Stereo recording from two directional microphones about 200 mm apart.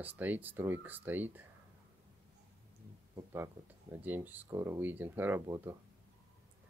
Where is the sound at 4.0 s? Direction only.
10° right (ahead or behind).